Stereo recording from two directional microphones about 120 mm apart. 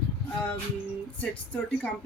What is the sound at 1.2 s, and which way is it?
Music, 10° left (ahead or behind).